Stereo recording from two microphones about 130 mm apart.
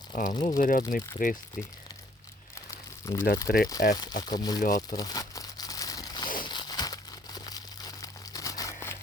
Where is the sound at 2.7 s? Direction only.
25° left (ahead or behind).